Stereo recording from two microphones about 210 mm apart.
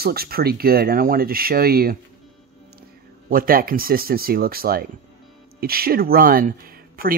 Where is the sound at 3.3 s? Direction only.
45° right (ahead or behind).